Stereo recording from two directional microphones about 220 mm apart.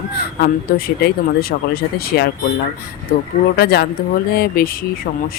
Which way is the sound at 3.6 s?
45° left (ahead or behind).